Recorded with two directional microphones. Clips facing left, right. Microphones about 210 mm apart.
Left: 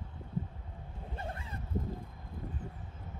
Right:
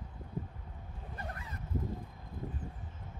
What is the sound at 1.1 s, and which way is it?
Vehicle, 25° left (ahead or behind).